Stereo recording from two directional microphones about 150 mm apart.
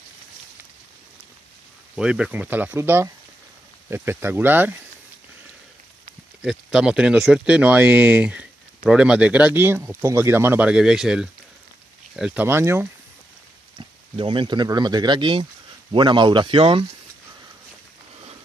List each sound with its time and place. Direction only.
2.0 s speech: 5° right (ahead or behind)
6.4 s speech: 5° right (ahead or behind)
13.7 s speech: 35° right (ahead or behind)